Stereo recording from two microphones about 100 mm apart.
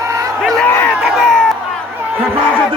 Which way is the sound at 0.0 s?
30° right (ahead or behind).